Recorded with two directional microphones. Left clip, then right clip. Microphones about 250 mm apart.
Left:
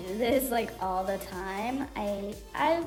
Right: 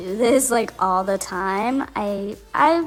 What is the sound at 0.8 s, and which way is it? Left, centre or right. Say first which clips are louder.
Speech: right 11 dB; right.